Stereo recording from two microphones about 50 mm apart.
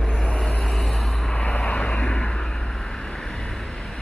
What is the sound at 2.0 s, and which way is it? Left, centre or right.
Vehicle, centre.